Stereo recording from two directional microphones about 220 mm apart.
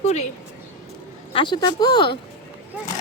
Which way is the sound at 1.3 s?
20° left (ahead or behind).